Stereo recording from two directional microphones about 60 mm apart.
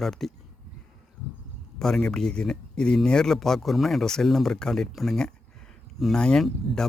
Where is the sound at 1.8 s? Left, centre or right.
Centre.